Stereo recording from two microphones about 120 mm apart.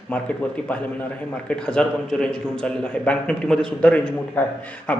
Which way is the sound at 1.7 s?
5° left (ahead or behind).